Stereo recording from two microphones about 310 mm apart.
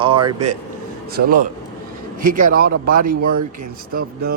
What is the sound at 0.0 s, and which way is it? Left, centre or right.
Speech, centre.